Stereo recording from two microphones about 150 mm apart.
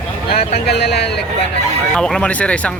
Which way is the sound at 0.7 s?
90° left.